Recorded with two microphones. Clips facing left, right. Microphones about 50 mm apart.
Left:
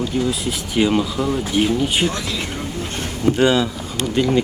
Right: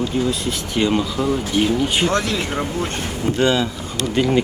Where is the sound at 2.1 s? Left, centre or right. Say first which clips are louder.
Right 5 dB; right.